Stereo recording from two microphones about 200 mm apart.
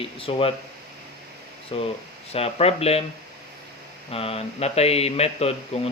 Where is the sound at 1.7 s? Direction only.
25° left (ahead or behind).